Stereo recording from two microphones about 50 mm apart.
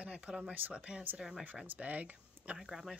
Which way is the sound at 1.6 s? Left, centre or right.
Right.